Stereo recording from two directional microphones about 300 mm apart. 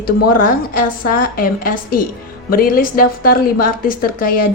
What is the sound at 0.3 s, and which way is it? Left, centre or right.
A woman's voice, left.